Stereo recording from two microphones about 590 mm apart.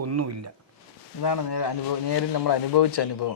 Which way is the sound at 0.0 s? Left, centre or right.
Right.